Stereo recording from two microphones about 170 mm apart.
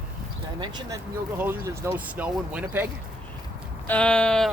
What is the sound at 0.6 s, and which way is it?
Speech, 25° right (ahead or behind).